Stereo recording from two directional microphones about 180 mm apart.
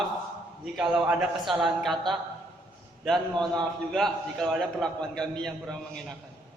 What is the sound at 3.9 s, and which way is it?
A man's voice, centre (ahead or behind).